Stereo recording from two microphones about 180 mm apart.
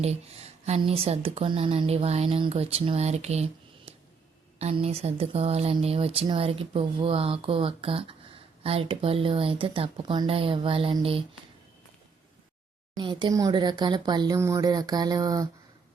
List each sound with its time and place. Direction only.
0.0 s a woman's voice: 35° right (ahead or behind)
13.0 s speech: 25° right (ahead or behind)